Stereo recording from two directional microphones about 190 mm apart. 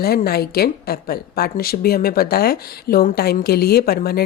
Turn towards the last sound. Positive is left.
turn(degrees=55)  # may be behind; listen again after turning